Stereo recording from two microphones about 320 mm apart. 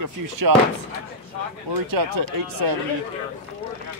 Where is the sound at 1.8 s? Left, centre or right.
Right.